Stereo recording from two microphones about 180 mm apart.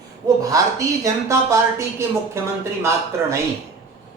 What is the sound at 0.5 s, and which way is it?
Speech, 20° right (ahead or behind).